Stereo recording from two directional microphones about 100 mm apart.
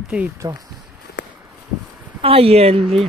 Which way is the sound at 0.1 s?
10° right (ahead or behind).